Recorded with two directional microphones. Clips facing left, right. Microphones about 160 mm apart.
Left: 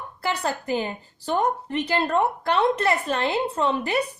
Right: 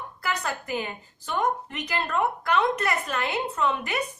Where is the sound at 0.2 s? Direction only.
30° left (ahead or behind).